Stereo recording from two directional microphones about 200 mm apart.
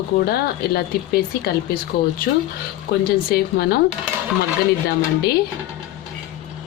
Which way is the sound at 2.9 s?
50° left (ahead or behind).